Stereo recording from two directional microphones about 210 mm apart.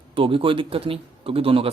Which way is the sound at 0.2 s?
25° right (ahead or behind).